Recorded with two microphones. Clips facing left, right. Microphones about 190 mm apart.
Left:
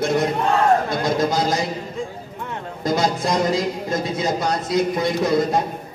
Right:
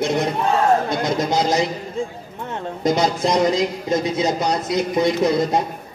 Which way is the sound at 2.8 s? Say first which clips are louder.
Right 2 dB; 20° right (ahead or behind).